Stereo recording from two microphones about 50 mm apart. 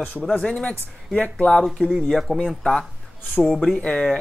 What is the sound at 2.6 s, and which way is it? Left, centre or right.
Speech, centre.